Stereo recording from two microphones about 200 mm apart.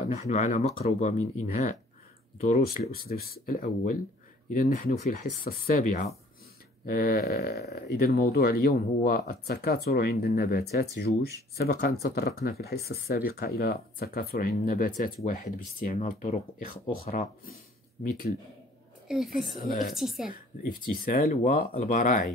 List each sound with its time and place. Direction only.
0.1 s speech: 35° left (ahead or behind)
2.9 s speech: 50° left (ahead or behind)
19.0 s speech: centre (ahead or behind)
20.2 s speech: 45° left (ahead or behind)